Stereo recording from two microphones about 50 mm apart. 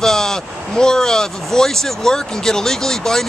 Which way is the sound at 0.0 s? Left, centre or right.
Centre.